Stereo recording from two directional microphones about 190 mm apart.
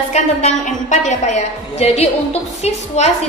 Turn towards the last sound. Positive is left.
turn(degrees=35)  # may be behind; listen again after turning